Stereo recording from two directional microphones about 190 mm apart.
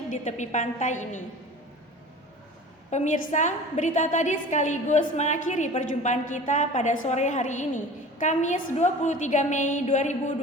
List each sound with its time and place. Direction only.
0.1 s a woman's voice: 40° left (ahead or behind)
2.9 s a woman's voice: 40° left (ahead or behind)